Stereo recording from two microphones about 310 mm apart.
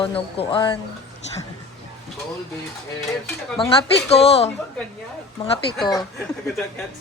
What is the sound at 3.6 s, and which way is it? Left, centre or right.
Speech, centre.